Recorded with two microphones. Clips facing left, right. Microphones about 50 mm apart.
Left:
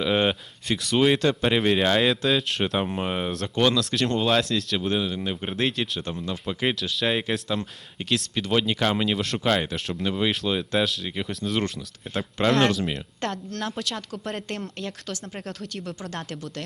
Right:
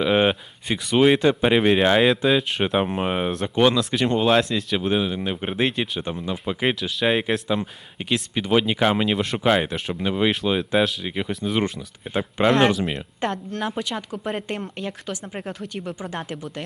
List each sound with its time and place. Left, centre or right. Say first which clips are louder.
0.0 s speech: right 4 dB; centre